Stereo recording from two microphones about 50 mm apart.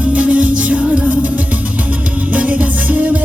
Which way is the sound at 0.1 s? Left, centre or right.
Right.